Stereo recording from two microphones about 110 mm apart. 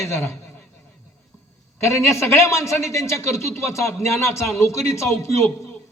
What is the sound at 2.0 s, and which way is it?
Speech, 25° left (ahead or behind).